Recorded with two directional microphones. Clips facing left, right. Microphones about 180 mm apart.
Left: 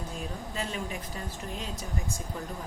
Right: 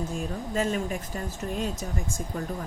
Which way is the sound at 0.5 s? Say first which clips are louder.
Right 9 dB; 45° right (ahead or behind).